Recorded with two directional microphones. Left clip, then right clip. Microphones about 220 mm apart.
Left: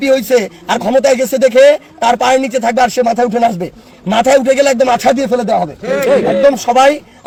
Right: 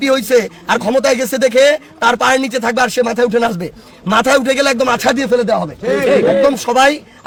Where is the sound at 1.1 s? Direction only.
15° right (ahead or behind).